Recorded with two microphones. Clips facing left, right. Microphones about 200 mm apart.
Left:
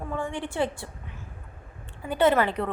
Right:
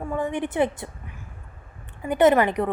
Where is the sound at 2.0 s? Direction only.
15° right (ahead or behind).